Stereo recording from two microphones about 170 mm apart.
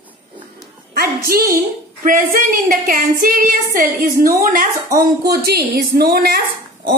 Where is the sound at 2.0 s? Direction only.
55° right (ahead or behind).